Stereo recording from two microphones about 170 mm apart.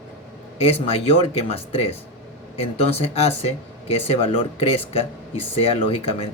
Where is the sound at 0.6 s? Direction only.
35° left (ahead or behind).